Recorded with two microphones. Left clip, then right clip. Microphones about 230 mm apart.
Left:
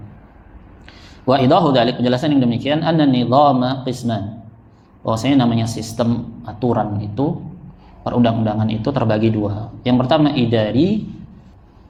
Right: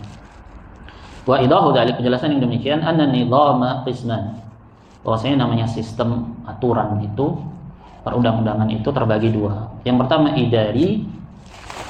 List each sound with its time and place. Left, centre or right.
1.3 s a man's voice: left